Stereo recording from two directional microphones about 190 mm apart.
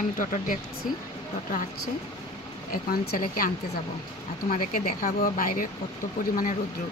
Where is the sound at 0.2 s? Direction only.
45° left (ahead or behind).